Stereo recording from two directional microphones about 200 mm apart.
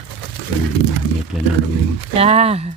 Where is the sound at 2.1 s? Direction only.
30° right (ahead or behind).